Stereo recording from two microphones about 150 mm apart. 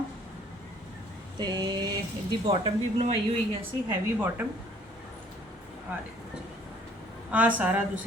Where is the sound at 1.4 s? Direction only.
30° right (ahead or behind).